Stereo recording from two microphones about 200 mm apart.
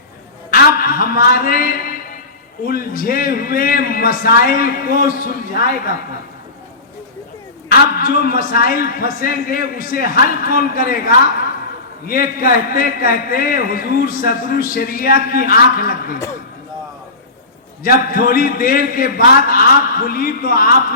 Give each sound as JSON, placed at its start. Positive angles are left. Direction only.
{"t": 0.5, "sound": "a sound", "side_deg": 45}
{"t": 2.6, "sound": "a man's voice", "side_deg": 45}
{"t": 7.7, "sound": "a man's voice", "side_deg": 50}
{"t": 17.8, "sound": "a man's voice", "side_deg": 50}